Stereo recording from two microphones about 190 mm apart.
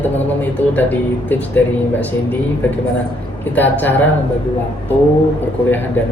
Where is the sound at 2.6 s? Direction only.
10° left (ahead or behind).